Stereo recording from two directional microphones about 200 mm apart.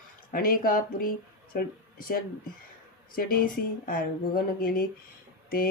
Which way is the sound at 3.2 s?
45° left (ahead or behind).